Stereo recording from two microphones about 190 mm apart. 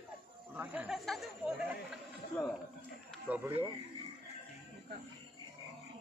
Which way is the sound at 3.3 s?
10° right (ahead or behind).